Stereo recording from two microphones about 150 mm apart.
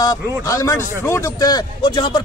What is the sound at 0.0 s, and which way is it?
Speech, 25° left (ahead or behind).